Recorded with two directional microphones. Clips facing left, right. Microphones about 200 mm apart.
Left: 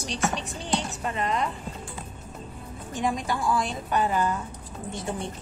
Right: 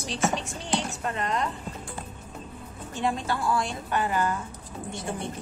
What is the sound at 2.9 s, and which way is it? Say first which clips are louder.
A woman's voice: even; 15° left (ahead or behind).